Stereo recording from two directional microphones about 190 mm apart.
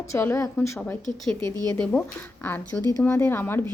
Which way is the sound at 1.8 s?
5° left (ahead or behind).